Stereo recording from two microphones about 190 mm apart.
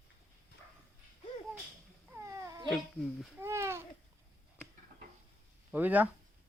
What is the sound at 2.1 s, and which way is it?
Cat, 15° right (ahead or behind).